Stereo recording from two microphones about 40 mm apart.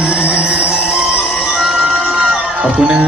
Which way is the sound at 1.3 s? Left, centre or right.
Centre.